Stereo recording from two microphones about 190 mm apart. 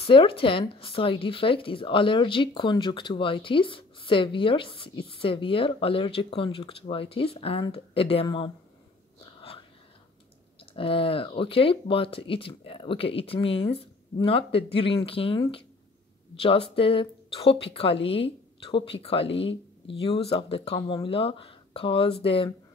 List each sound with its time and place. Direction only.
0.0 s speech: 30° left (ahead or behind)
9.4 s whispering: 30° left (ahead or behind)
10.6 s speech: 30° left (ahead or behind)